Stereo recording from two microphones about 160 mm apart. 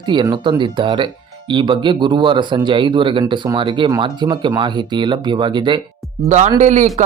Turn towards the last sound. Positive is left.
turn(degrees=-50)  # may be behind; listen again after turning